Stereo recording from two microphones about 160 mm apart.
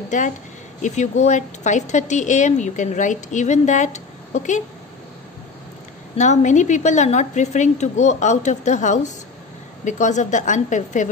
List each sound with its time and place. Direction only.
0.8 s speech: 45° left (ahead or behind)
6.1 s speech: 50° left (ahead or behind)